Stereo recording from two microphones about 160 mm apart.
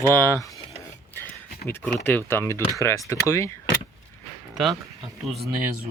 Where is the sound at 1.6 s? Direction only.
10° left (ahead or behind).